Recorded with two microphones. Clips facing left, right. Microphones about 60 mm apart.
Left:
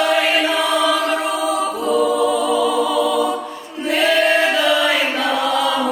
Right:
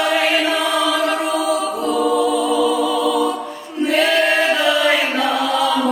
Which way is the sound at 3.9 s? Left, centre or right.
Centre.